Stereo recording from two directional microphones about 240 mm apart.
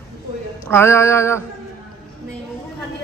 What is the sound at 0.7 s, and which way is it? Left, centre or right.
Speech, centre.